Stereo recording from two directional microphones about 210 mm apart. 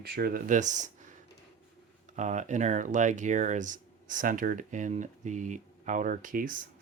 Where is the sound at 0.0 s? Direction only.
50° right (ahead or behind).